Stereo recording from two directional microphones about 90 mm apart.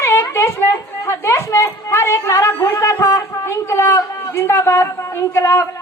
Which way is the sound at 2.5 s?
20° left (ahead or behind).